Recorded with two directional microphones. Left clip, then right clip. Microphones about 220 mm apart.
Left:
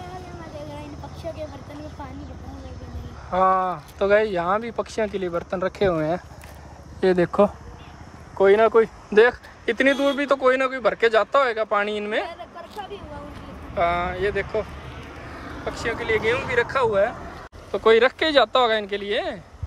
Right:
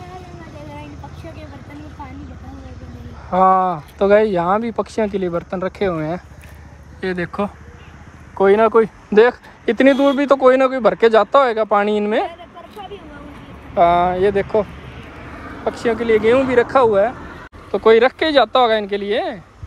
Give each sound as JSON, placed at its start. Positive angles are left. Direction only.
{"t": 3.3, "sound": "speech", "side_deg": 10}
{"t": 7.0, "sound": "speech", "side_deg": 15}
{"t": 8.4, "sound": "speech", "side_deg": 5}
{"t": 13.7, "sound": "speech", "side_deg": 5}